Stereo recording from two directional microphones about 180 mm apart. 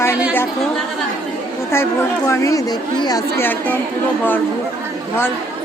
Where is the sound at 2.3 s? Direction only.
20° left (ahead or behind).